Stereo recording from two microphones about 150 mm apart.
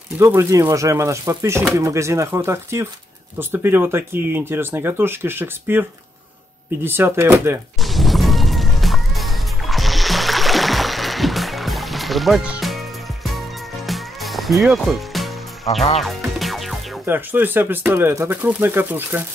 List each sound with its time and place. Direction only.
0.2 s speech: 20° right (ahead or behind)
7.8 s music: centre (ahead or behind)
17.0 s speech: 15° right (ahead or behind)